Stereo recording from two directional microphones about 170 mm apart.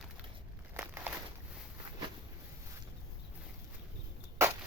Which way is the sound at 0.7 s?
10° right (ahead or behind).